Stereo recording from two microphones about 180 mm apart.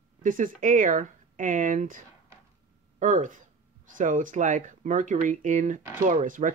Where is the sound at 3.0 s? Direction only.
45° right (ahead or behind).